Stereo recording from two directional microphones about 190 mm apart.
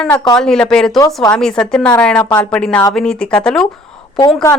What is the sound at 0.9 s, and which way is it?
Speech, 20° left (ahead or behind).